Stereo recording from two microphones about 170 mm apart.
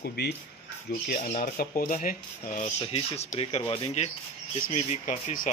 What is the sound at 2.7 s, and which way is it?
Speech, 40° left (ahead or behind).